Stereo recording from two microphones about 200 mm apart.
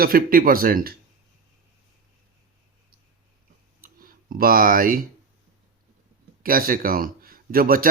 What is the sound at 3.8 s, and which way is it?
Clicking, 45° right (ahead or behind).